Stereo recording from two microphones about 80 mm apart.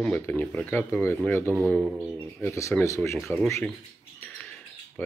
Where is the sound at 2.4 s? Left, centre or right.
Left.